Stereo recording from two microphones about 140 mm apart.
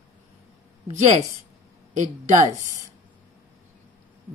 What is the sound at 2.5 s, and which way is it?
Speech, 25° right (ahead or behind).